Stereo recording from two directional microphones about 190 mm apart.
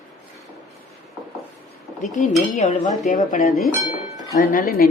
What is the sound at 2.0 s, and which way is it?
Speech, 40° left (ahead or behind).